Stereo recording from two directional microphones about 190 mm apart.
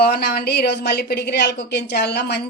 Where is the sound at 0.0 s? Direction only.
55° left (ahead or behind).